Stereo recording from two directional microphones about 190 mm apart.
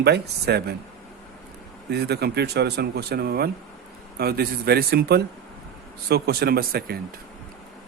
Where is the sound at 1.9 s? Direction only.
60° right (ahead or behind).